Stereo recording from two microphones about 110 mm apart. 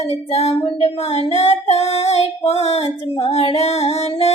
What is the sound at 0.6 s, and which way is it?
Female singing, 60° left (ahead or behind).